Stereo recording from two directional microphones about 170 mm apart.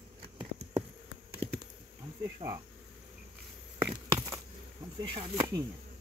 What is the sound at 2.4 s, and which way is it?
Speech, 35° right (ahead or behind).